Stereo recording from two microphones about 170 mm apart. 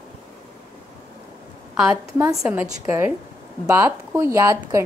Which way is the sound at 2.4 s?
10° right (ahead or behind).